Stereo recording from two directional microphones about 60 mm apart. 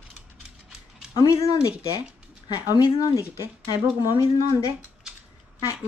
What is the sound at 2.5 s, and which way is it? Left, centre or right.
Speech, left.